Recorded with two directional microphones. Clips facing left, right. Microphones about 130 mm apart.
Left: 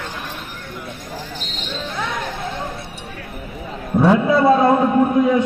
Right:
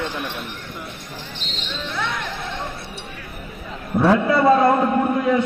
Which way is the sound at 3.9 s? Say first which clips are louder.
Left 2 dB; 15° left (ahead or behind).